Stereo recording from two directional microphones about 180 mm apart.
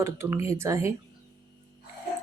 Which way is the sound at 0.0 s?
15° right (ahead or behind).